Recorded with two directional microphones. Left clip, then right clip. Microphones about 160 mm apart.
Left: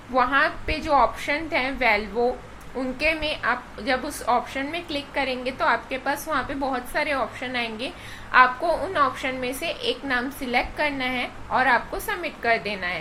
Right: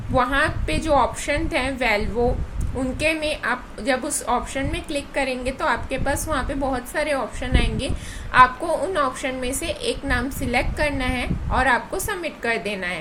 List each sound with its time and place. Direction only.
0.1 s a woman's voice: 35° right (ahead or behind)